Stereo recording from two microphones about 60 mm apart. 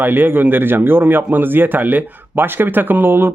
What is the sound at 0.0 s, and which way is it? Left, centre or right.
Speech, right.